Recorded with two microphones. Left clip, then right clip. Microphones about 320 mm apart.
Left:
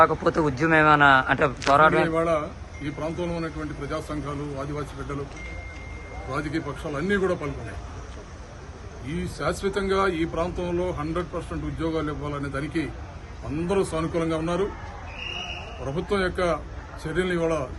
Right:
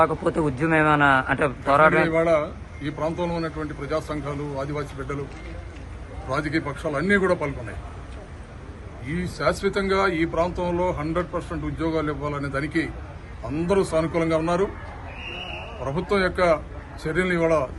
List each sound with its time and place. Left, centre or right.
0.0 s a man's voice: centre
6.3 s a man's voice: centre
9.0 s a man's voice: centre
13.9 s a man's voice: centre
15.9 s a man's voice: centre